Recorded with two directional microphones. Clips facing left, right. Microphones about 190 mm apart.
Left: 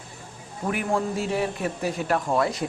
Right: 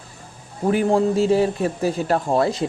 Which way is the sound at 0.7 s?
30° right (ahead or behind).